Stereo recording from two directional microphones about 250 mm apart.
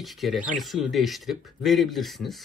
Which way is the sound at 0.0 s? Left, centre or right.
Centre.